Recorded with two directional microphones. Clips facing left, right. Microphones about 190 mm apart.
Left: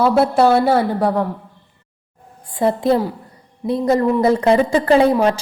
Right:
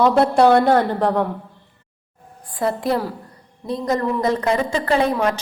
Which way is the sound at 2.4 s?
25° left (ahead or behind).